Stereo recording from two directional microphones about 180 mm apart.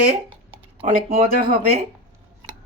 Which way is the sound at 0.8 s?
35° right (ahead or behind).